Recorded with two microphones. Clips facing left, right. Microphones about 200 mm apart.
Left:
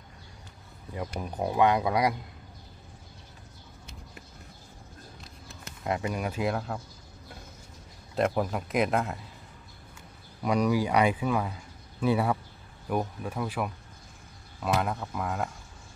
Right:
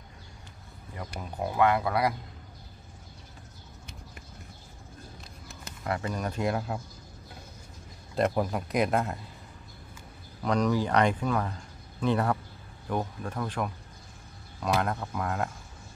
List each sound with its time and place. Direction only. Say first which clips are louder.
0.9 s speech: left 3 dB; 15° left (ahead or behind)
5.9 s speech: left 1 dB; 15° left (ahead or behind); by 6.8 s 5° right (ahead or behind)
8.2 s a man's voice: even; centre (ahead or behind)
10.4 s a man's voice: left 1 dB; 10° left (ahead or behind)